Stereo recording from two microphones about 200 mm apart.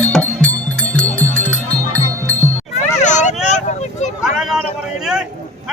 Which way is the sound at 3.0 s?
35° left (ahead or behind).